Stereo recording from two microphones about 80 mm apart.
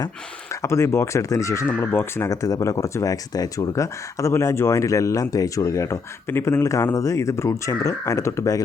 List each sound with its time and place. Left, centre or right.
0.6 s speech: left
1.6 s speech: left